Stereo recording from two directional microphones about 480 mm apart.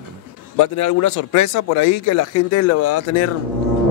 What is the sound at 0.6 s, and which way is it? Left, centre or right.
A man's voice, left.